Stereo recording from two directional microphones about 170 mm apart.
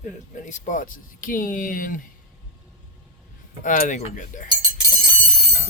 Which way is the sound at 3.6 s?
50° left (ahead or behind).